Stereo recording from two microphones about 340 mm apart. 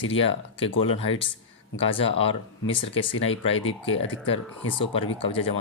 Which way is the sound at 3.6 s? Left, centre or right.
Centre.